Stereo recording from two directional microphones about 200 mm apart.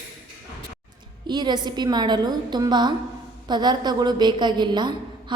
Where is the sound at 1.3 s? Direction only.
20° right (ahead or behind).